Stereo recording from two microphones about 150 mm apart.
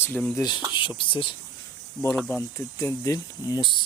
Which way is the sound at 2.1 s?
10° left (ahead or behind).